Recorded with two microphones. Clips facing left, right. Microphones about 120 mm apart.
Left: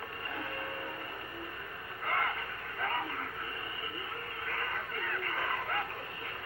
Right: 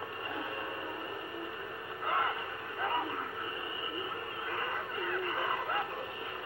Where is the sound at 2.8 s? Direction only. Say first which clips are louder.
Right 2 dB; 15° right (ahead or behind).